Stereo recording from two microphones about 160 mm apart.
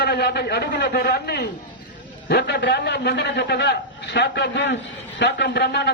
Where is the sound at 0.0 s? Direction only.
90° left.